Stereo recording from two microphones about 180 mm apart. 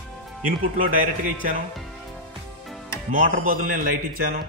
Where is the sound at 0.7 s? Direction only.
45° right (ahead or behind).